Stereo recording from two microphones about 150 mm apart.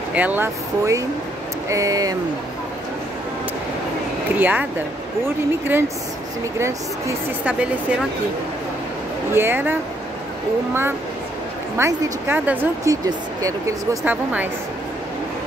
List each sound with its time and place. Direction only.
0.1 s a woman's voice: 10° right (ahead or behind)
4.4 s a woman's voice: 10° right (ahead or behind)
9.3 s a woman's voice: 15° right (ahead or behind)
14.0 s a woman's voice: 10° right (ahead or behind)